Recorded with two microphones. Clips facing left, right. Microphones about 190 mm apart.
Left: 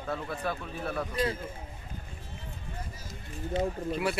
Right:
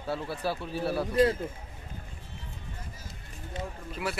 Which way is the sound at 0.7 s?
30° right (ahead or behind).